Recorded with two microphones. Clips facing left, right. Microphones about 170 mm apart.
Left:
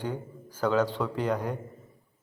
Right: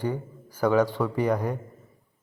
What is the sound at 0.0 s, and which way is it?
A man's voice, 10° right (ahead or behind).